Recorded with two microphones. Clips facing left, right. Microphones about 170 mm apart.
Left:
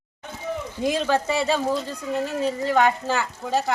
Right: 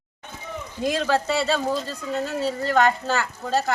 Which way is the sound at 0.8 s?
15° left (ahead or behind).